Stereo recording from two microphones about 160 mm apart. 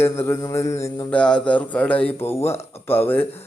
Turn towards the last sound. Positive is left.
turn(degrees=15)  # may be behind; listen again after turning